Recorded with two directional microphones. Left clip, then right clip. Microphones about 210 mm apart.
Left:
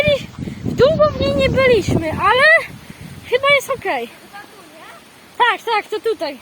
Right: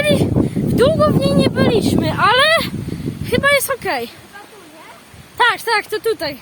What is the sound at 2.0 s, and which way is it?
Speech, 25° right (ahead or behind).